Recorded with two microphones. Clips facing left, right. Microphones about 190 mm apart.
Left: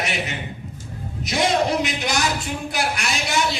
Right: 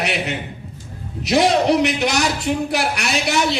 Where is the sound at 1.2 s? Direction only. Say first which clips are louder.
Right 5 dB; 65° right (ahead or behind).